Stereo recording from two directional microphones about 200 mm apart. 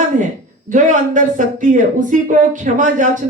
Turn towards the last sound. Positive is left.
turn(degrees=-40)  # may be behind; listen again after turning